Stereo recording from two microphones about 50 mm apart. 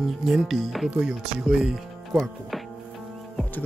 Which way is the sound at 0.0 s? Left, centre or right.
Centre.